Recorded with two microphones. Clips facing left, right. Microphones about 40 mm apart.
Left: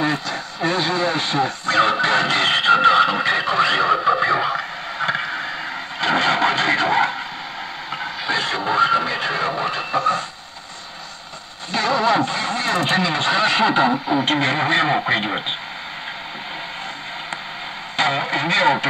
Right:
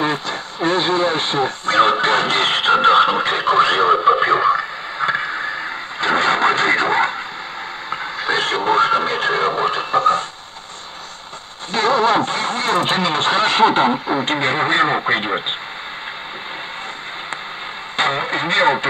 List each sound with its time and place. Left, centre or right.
0.0 s radio: right
5.2 s a sound: right
5.9 s vehicle: right
8.3 s speech: right
11.7 s speech: right
17.9 s speech: right